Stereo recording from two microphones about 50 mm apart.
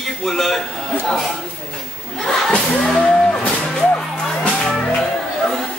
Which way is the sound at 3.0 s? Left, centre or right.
Centre.